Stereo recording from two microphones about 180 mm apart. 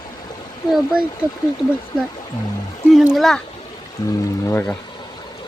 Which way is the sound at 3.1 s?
Centre (ahead or behind).